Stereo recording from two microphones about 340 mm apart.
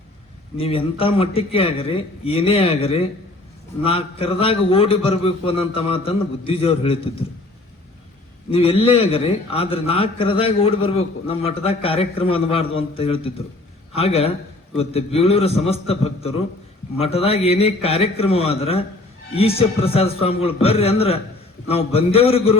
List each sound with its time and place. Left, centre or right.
0.5 s a man's voice: centre
8.4 s a man's voice: centre